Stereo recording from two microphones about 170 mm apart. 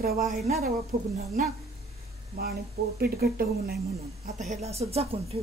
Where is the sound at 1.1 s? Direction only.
40° right (ahead or behind).